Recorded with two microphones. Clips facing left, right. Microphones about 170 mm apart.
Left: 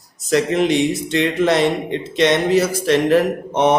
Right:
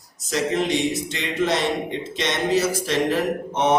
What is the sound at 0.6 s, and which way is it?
Speech, 60° left (ahead or behind).